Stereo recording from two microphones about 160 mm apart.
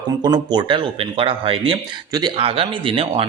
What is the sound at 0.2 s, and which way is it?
Speech, 25° right (ahead or behind).